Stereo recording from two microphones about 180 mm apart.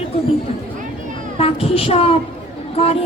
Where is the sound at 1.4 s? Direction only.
35° left (ahead or behind).